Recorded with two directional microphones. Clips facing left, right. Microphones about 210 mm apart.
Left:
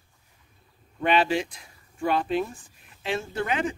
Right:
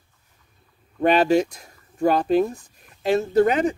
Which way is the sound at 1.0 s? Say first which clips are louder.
Right 6 dB; 40° right (ahead or behind).